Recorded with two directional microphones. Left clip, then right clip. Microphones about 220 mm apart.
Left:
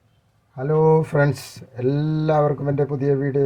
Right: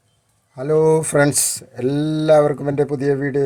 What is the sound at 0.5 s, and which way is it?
A man's voice, 50° right (ahead or behind).